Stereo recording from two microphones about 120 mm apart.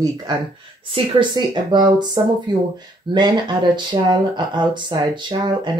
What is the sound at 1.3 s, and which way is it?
Speech, 35° right (ahead or behind).